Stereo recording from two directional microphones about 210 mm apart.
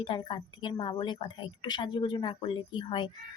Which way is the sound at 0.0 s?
20° left (ahead or behind).